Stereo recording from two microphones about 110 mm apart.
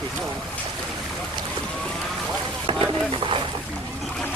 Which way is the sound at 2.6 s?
55° right (ahead or behind).